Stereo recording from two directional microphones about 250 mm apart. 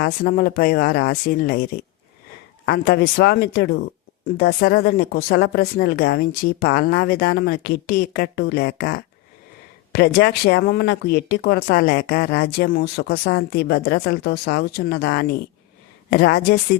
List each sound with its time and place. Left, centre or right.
0.0 s speech: left